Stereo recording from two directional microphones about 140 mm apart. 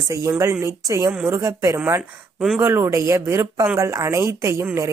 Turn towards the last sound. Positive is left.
turn(degrees=-20)  # may be behind; listen again after turning